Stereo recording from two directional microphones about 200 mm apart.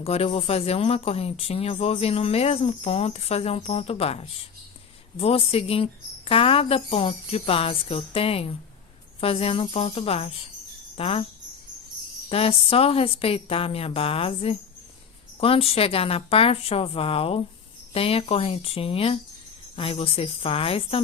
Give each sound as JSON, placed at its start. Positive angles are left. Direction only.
{"t": 0.0, "sound": "speech", "side_deg": 30}
{"t": 12.3, "sound": "speech", "side_deg": 30}